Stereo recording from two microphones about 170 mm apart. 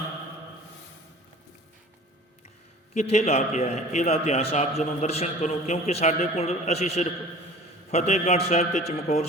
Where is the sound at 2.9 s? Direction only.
45° left (ahead or behind).